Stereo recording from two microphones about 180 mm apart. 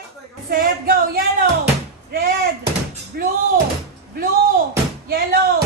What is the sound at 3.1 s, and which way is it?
Music, 60° right (ahead or behind).